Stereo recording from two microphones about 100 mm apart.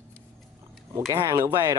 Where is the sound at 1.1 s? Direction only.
40° right (ahead or behind).